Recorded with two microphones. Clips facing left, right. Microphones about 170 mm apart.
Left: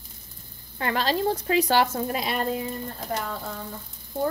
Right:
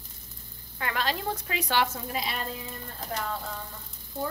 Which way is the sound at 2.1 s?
55° left (ahead or behind).